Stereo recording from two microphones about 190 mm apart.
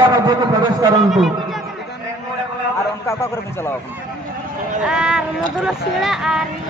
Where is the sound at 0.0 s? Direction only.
20° right (ahead or behind).